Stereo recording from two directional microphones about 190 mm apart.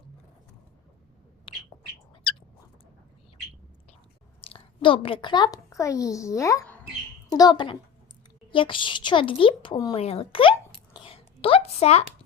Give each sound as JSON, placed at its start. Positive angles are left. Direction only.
{"t": 1.5, "sound": "bird", "side_deg": 25}
{"t": 4.4, "sound": "a child's voice", "side_deg": 30}
{"t": 10.9, "sound": "a sound", "side_deg": 30}